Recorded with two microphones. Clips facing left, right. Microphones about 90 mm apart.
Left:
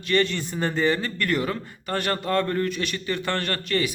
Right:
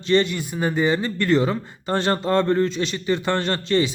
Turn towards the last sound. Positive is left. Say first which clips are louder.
# right 5 dB
turn(degrees=-25)  # may be behind; listen again after turning